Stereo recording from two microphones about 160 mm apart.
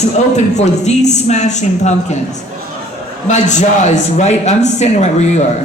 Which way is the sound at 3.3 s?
45° left (ahead or behind).